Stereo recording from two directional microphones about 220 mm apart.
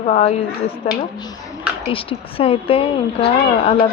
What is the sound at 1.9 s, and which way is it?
Speech, 25° left (ahead or behind).